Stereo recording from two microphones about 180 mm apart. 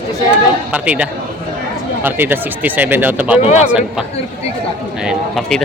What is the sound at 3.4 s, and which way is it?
Speech, 35° left (ahead or behind).